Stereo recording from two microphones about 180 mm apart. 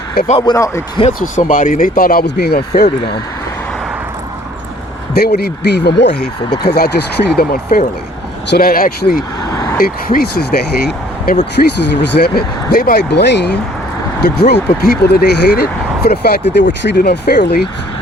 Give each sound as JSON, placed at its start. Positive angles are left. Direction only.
{"t": 0.3, "sound": "speech", "side_deg": 30}
{"t": 0.5, "sound": "speech", "side_deg": 15}
{"t": 1.2, "sound": "speech", "side_deg": 45}
{"t": 5.1, "sound": "speech", "side_deg": 60}
{"t": 7.3, "sound": "speech", "side_deg": 55}
{"t": 9.4, "sound": "vehicle", "side_deg": 20}
{"t": 9.7, "sound": "speech", "side_deg": 55}
{"t": 11.8, "sound": "speech", "side_deg": 70}